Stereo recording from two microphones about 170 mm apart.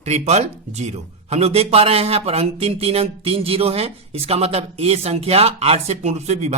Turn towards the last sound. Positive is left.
turn(degrees=-40)  # may be behind; listen again after turning